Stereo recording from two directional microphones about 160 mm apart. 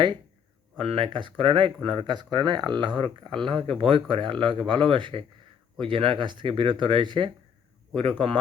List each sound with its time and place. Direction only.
0.8 s speech: 35° right (ahead or behind)